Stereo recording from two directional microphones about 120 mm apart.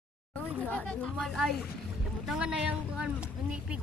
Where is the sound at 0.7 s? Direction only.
10° left (ahead or behind).